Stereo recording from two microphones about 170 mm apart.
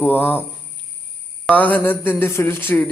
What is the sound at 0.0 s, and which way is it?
Speech, 10° left (ahead or behind).